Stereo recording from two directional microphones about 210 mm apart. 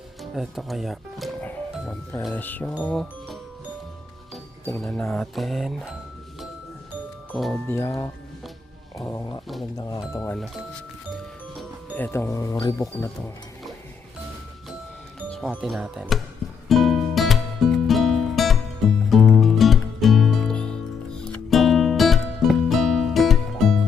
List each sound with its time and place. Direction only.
0.2 s speech: centre (ahead or behind)
4.8 s speech: 5° left (ahead or behind)
7.3 s speech: centre (ahead or behind)
10.3 s speech: centre (ahead or behind)
11.9 s speech: 10° left (ahead or behind)
15.3 s speech: centre (ahead or behind)
16.6 s music: centre (ahead or behind)